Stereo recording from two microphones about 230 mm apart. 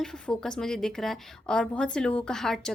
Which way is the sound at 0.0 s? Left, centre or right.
Centre.